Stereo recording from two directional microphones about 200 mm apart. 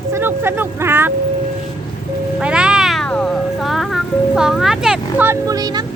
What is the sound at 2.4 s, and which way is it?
Cat, 5° right (ahead or behind).